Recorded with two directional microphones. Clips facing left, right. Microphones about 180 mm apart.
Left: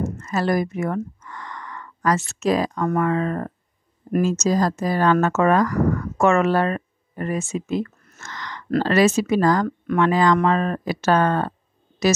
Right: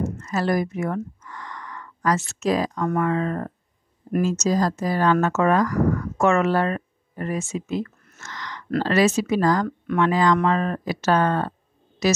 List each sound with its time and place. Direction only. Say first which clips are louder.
0.0 s speech: left 1 dB; 60° left (ahead or behind)